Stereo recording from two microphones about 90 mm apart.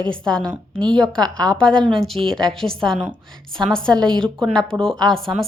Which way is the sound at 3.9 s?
50° right (ahead or behind).